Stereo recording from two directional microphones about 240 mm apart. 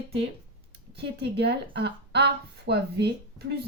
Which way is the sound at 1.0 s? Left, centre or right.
Right.